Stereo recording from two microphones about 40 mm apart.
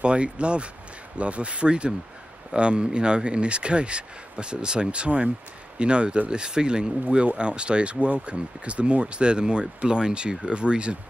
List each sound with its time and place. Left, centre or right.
0.0 s speech: right